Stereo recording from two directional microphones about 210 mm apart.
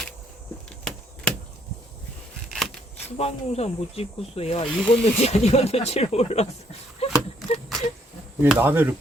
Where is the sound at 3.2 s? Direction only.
30° left (ahead or behind).